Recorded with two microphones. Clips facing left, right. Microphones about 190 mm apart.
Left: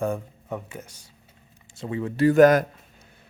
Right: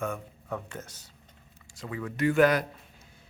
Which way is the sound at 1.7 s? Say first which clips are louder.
Left 7 dB; 25° left (ahead or behind).